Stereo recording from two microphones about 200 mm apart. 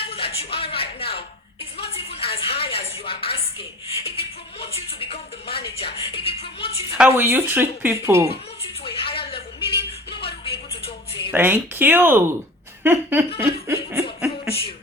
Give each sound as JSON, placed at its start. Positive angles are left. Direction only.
{"t": 0.1, "sound": "a woman's voice", "side_deg": 30}
{"t": 6.9, "sound": "speech", "side_deg": -10}
{"t": 8.8, "sound": "a sound", "side_deg": 25}
{"t": 11.3, "sound": "speech", "side_deg": -10}
{"t": 12.8, "sound": "laughter", "side_deg": -10}